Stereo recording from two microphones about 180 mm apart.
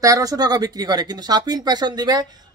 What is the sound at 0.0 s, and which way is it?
Speech, 20° right (ahead or behind).